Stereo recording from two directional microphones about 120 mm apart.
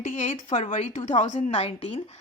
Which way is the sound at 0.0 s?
90° left.